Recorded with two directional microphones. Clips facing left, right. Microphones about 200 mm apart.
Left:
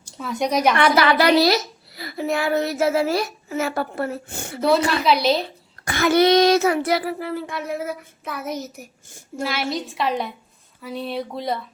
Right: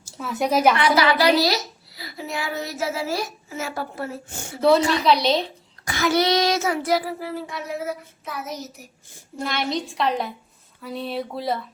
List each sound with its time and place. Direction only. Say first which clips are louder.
0.0 s a woman's voice: left 1 dB; 5° right (ahead or behind)
0.8 s a woman's voice: left 2 dB; 55° left (ahead or behind)
5.0 s a woman's voice: even; 5° left (ahead or behind)
5.8 s a woman's voice: left 4 dB; 55° left (ahead or behind)
9.4 s a woman's voice: left 1 dB; 5° left (ahead or behind)